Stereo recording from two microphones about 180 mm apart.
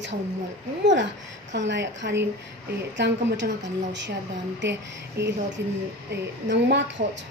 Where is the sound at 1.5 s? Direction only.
80° right.